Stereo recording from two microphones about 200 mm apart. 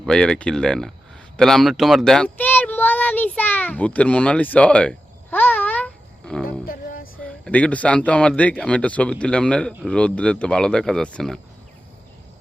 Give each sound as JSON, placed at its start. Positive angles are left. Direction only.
{"t": 0.0, "sound": "a man's voice", "side_deg": 5}
{"t": 6.7, "sound": "music", "side_deg": 45}
{"t": 7.2, "sound": "a man's voice", "side_deg": 5}